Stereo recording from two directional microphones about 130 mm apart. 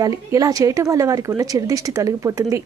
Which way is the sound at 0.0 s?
25° right (ahead or behind).